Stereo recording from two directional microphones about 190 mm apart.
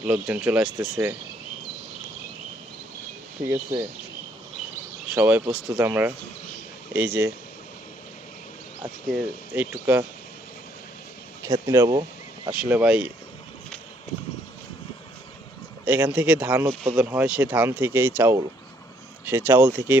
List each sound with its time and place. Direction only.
0.0 s speech: 5° right (ahead or behind)
3.5 s speech: 15° right (ahead or behind)
5.1 s speech: 10° right (ahead or behind)
8.8 s speech: 5° right (ahead or behind)
11.4 s speech: 15° right (ahead or behind)
12.5 s speech: 5° right (ahead or behind)
15.8 s speech: 10° right (ahead or behind)
16.6 s speech: 30° right (ahead or behind)
17.0 s speech: 10° right (ahead or behind)